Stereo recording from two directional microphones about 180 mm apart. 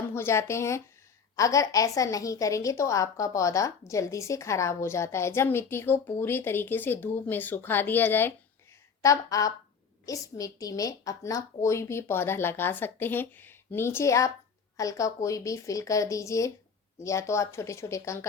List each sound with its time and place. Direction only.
0.1 s a woman's voice: 15° left (ahead or behind)